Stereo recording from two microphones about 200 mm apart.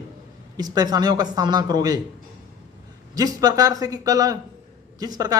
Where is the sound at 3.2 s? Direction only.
15° right (ahead or behind).